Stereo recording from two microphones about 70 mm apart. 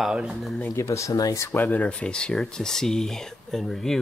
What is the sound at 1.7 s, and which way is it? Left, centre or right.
Speech, centre.